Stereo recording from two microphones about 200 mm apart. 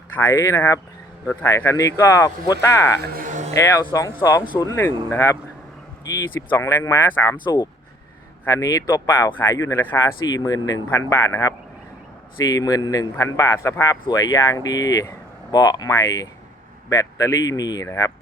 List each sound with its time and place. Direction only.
0.2 s speech: 15° left (ahead or behind)
3.2 s music: 40° right (ahead or behind)
3.5 s speech: 15° left (ahead or behind)